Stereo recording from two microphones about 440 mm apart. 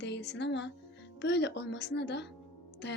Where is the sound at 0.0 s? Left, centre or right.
Left.